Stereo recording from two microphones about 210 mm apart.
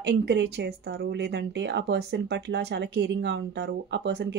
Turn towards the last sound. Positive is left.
turn(degrees=-55)  # may be behind; listen again after turning